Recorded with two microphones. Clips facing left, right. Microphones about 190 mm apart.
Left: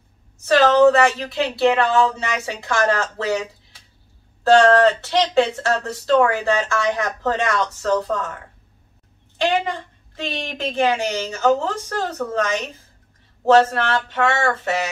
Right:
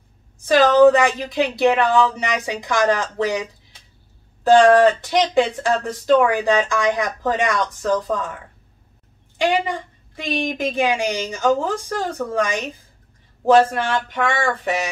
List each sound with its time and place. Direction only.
0.4 s speech: 15° right (ahead or behind)
9.4 s speech: 10° right (ahead or behind)